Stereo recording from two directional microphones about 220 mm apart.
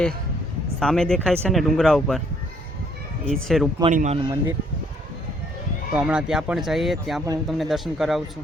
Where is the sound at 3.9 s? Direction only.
35° right (ahead or behind).